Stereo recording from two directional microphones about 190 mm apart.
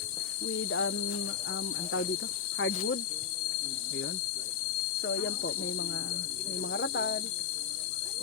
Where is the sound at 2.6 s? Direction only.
90° left.